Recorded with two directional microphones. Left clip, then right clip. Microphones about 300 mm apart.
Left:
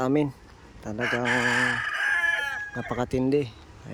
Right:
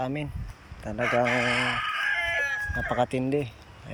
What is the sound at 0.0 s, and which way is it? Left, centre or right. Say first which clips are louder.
Speech: left 7 dB; centre.